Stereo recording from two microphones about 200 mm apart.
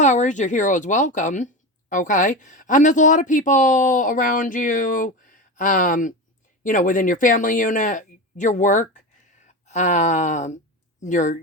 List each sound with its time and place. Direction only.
0.0 s speech: 35° left (ahead or behind)